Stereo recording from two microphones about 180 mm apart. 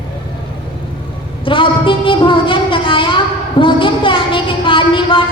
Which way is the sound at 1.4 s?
30° left (ahead or behind).